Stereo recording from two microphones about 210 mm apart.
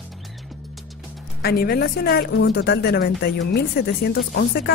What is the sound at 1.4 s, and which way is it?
A woman's voice, 50° left (ahead or behind).